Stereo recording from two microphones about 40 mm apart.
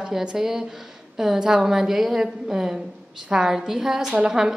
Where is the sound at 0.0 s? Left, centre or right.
Centre.